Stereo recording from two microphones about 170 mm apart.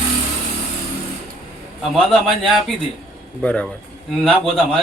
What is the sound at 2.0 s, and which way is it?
A man's voice, centre (ahead or behind).